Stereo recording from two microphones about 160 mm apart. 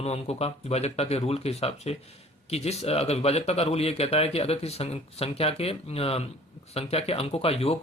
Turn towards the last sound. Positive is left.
turn(degrees=40)  # may be behind; listen again after turning